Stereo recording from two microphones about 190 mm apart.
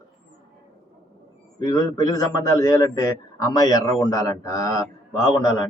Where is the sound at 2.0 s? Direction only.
15° left (ahead or behind).